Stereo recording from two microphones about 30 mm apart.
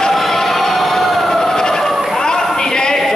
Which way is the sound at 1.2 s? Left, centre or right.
Centre.